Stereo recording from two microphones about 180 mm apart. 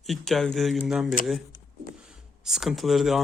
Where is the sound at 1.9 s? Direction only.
5° right (ahead or behind).